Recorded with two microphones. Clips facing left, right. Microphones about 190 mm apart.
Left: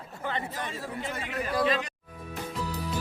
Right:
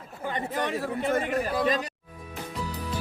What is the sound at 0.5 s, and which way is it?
A man's voice, 65° right (ahead or behind).